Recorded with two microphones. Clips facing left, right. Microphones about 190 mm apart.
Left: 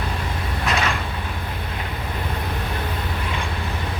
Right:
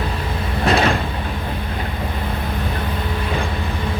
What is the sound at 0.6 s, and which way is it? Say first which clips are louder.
Vehicle: right 7 dB; 35° right (ahead or behind).